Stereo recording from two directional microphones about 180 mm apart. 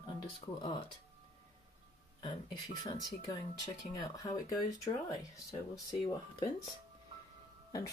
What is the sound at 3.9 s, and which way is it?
Speech, 20° left (ahead or behind).